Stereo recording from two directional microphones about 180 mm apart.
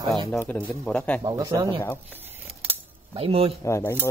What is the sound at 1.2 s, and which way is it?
Speech, 20° right (ahead or behind).